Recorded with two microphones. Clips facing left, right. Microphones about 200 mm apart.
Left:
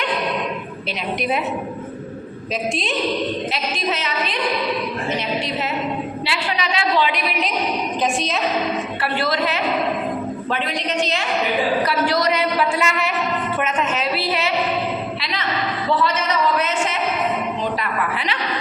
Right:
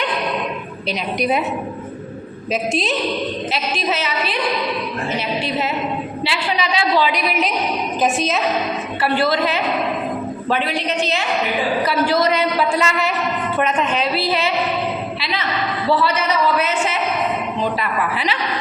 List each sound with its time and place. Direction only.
3.5 s a woman's voice: 5° right (ahead or behind)
6.2 s a woman's voice: centre (ahead or behind)
12.2 s speech: 30° right (ahead or behind)
13.7 s a woman's voice: centre (ahead or behind)